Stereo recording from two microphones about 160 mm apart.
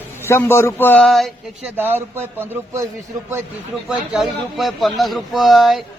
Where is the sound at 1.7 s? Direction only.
15° right (ahead or behind).